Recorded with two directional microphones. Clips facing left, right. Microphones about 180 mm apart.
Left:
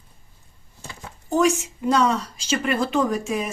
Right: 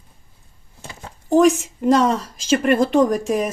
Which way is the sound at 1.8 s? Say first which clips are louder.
Right 4 dB; 50° right (ahead or behind).